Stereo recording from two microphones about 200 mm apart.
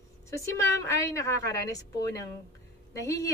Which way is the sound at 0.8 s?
15° left (ahead or behind).